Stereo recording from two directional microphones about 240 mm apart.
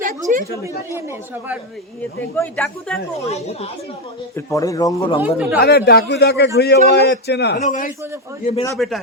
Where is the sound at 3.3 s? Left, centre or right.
Left.